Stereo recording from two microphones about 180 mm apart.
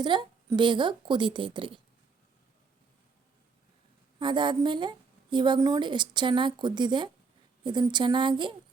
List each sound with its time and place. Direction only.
0.0 s a woman's voice: 25° right (ahead or behind)
4.2 s a woman's voice: 25° right (ahead or behind)